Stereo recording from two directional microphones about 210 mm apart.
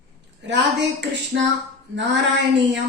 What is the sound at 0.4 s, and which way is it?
Music, 55° right (ahead or behind).